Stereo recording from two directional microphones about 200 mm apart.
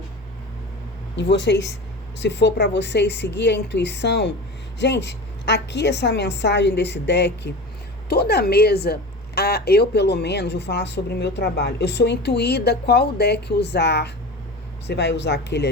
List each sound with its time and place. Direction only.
1.1 s speech: 65° left (ahead or behind)